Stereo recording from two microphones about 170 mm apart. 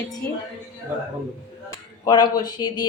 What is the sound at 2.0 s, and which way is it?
Speech, 25° left (ahead or behind).